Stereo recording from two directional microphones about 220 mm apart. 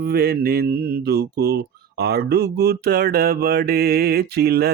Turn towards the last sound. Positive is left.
turn(degrees=-45)  # may be behind; listen again after turning